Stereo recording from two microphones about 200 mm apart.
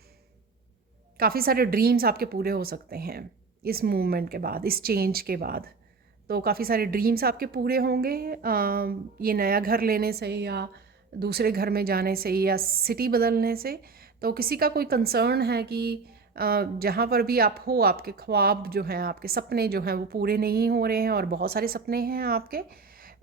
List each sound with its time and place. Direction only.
1.1 s a woman's voice: 50° right (ahead or behind)